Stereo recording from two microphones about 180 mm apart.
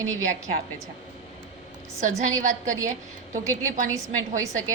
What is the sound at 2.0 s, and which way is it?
Speech, 45° right (ahead or behind).